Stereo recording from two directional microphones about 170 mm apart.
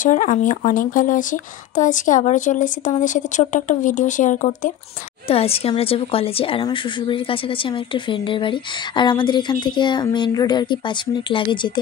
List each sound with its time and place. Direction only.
0.0 s speech: 50° left (ahead or behind)
5.3 s a woman's voice: 35° left (ahead or behind)